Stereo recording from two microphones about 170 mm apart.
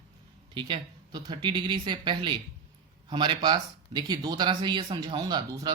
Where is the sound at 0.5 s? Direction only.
25° right (ahead or behind).